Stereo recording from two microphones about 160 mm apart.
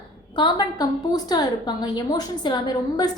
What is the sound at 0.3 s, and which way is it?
A woman's voice, 25° left (ahead or behind).